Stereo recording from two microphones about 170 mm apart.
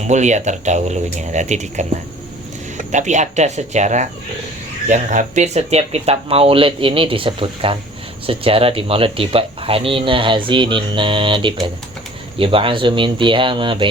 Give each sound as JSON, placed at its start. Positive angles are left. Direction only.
{"t": 0.1, "sound": "speech", "side_deg": -45}
{"t": 2.9, "sound": "speech", "side_deg": -45}